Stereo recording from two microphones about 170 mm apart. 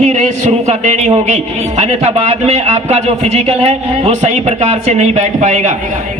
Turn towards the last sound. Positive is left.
turn(degrees=-45)  # may be behind; listen again after turning